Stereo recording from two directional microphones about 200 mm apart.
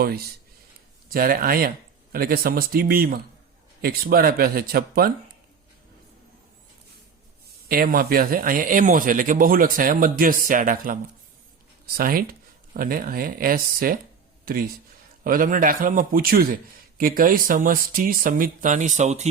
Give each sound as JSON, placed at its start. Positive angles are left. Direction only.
{"t": 0.0, "sound": "speech", "side_deg": -50}
{"t": 7.7, "sound": "speech", "side_deg": -45}
{"t": 11.9, "sound": "speech", "side_deg": -45}